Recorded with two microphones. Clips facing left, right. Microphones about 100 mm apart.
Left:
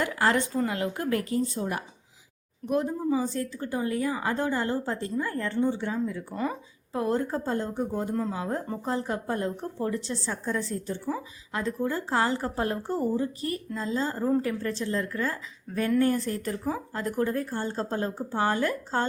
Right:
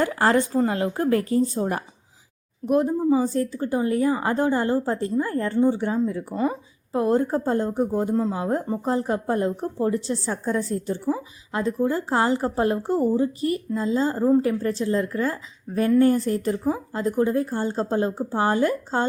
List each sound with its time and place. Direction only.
0.0 s a woman's voice: 35° right (ahead or behind)